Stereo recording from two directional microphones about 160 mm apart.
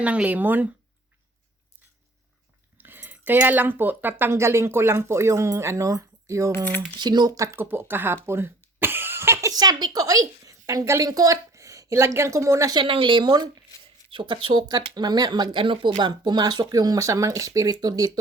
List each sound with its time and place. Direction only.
0.0 s speech: 10° right (ahead or behind)
2.7 s speech: 10° right (ahead or behind)
6.7 s speech: 10° left (ahead or behind)
7.0 s speech: 25° right (ahead or behind)